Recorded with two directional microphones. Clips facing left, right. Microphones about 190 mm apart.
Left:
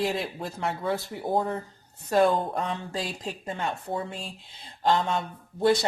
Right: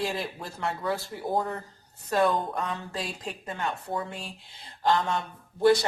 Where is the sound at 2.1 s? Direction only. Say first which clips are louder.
Left 3 dB; 30° left (ahead or behind).